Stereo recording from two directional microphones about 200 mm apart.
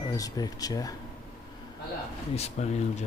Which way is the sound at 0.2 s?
20° left (ahead or behind).